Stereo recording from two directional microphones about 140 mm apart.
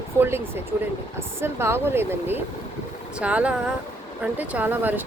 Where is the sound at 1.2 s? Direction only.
15° right (ahead or behind).